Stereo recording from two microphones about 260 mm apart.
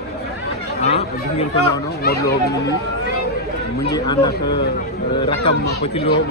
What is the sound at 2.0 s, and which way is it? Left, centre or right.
Speech, left.